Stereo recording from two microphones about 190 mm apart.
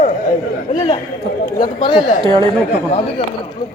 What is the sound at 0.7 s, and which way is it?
Chatter, 30° left (ahead or behind).